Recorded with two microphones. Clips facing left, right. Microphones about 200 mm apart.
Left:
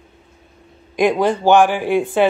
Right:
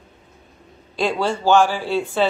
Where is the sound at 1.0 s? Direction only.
15° left (ahead or behind).